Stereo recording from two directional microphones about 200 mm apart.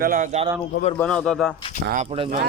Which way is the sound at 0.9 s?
5° left (ahead or behind).